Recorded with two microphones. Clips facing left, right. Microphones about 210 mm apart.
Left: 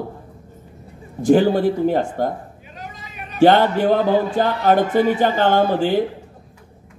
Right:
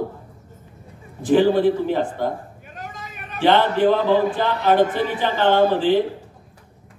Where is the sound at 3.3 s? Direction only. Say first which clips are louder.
Left 3 dB; 45° left (ahead or behind).